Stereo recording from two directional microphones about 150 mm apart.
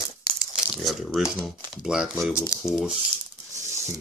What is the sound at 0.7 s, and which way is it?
Speech, centre (ahead or behind).